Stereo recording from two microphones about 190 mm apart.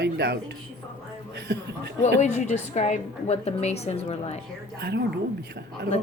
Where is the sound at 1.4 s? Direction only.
60° right (ahead or behind).